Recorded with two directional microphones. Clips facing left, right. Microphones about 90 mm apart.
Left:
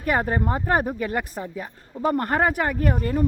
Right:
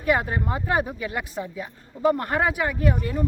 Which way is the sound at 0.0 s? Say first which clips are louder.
Even; 45° left (ahead or behind).